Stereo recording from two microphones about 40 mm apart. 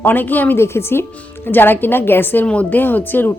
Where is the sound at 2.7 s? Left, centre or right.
Left.